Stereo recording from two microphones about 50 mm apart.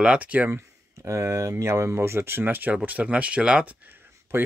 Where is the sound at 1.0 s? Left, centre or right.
Right.